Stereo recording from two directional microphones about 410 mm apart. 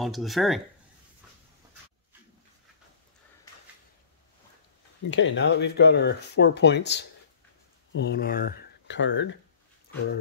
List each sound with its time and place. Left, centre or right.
0.0 s speech: centre
5.1 s speech: left